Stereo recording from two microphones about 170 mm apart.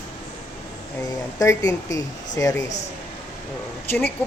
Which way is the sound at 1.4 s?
20° left (ahead or behind).